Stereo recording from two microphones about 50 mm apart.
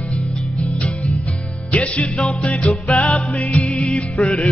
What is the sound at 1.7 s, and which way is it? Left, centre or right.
Music, left.